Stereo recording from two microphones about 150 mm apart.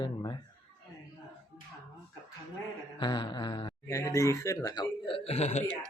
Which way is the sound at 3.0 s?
30° left (ahead or behind).